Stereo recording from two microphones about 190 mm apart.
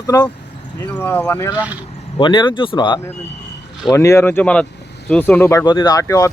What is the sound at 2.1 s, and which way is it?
Speech, 25° left (ahead or behind).